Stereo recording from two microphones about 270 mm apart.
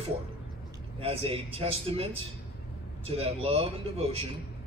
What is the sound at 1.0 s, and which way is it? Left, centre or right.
A man's voice, right.